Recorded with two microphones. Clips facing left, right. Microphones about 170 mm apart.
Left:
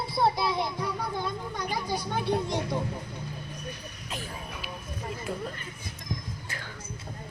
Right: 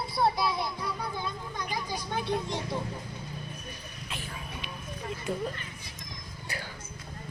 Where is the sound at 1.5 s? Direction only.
60° left (ahead or behind).